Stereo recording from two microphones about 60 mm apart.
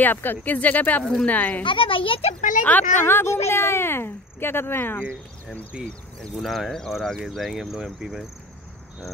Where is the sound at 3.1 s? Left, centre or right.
Left.